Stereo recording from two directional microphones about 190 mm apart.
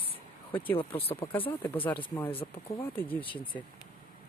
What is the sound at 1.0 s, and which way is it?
Speech, 30° left (ahead or behind).